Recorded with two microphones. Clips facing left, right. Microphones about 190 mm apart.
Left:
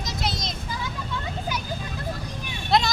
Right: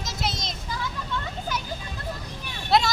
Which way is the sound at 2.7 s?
5° right (ahead or behind).